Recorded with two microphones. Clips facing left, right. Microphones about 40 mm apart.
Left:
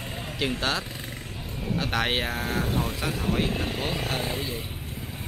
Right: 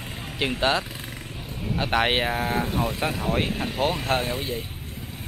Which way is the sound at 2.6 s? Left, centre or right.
Centre.